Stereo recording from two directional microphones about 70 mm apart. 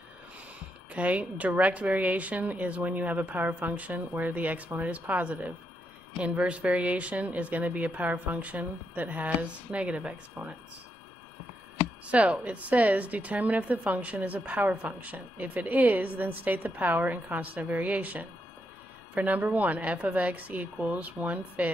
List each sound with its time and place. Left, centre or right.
0.9 s a woman's voice: centre
12.1 s a woman's voice: centre